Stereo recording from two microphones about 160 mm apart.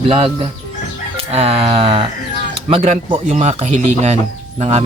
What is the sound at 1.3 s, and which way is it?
Speech, 40° right (ahead or behind).